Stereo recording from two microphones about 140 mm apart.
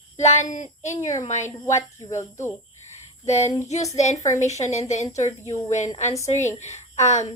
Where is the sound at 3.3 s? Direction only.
55° left (ahead or behind).